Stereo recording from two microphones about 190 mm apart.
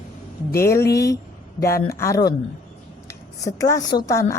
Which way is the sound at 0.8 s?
60° left (ahead or behind).